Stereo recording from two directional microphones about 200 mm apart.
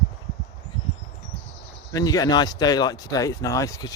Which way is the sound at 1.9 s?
20° left (ahead or behind).